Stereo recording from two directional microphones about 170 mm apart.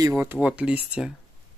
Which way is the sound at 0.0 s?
15° right (ahead or behind).